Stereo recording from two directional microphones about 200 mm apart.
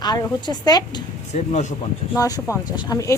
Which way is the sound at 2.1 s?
15° left (ahead or behind).